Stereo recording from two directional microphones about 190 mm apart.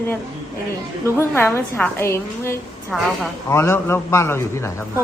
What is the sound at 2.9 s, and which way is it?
Speech, centre (ahead or behind).